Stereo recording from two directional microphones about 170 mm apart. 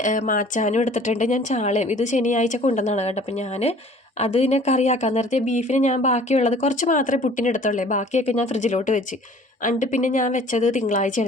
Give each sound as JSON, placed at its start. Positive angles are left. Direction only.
{"t": 0.0, "sound": "speech", "side_deg": 50}